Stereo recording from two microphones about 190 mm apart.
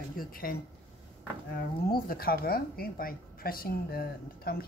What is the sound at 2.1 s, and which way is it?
A woman's voice, 50° left (ahead or behind).